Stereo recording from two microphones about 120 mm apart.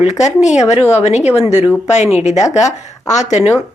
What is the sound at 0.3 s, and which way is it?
A woman's voice, 70° left (ahead or behind).